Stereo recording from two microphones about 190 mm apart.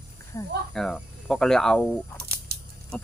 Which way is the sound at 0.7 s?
Centre (ahead or behind).